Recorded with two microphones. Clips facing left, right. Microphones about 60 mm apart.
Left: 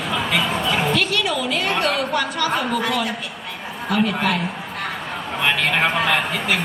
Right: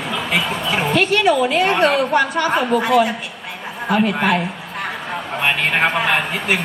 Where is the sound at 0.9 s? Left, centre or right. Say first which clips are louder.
Right 6 dB; right.